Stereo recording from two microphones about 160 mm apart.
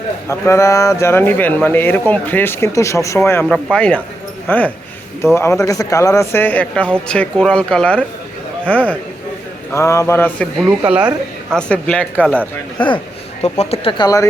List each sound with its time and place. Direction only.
0.3 s speech: 20° left (ahead or behind)
3.5 s speech: 5° left (ahead or behind)
10.6 s speech: 10° right (ahead or behind)
11.5 s speech: 5° left (ahead or behind)
13.4 s speech: 40° left (ahead or behind); by 14.3 s 25° left (ahead or behind)